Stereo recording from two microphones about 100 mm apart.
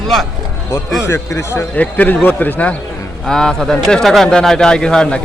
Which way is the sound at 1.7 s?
15° left (ahead or behind).